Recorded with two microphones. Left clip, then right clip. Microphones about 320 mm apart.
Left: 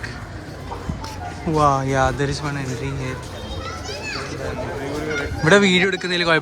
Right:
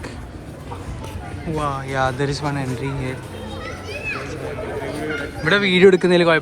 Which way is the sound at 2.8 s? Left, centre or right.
Left.